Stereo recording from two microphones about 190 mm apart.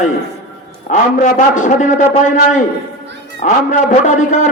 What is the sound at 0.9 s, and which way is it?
A man's voice, 40° left (ahead or behind).